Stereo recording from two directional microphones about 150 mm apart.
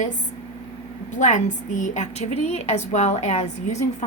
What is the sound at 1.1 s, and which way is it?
A woman's voice, 55° left (ahead or behind).